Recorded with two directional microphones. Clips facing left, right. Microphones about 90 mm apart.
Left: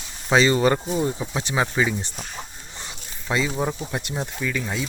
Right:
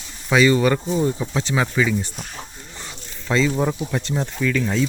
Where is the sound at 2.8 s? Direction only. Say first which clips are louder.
Right 1 dB; 15° left (ahead or behind).